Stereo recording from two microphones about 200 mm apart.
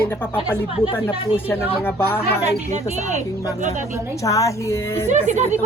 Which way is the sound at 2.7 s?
35° right (ahead or behind).